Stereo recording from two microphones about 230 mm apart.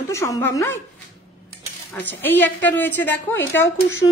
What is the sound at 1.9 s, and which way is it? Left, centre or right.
A woman's voice, centre.